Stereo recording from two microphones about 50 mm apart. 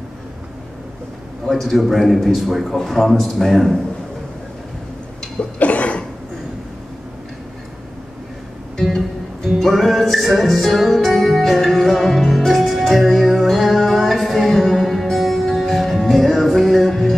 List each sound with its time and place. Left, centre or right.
1.4 s a man's voice: centre
5.4 s a sound: left
9.7 s music: centre